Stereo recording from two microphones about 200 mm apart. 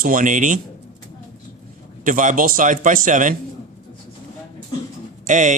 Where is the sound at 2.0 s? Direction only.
40° right (ahead or behind).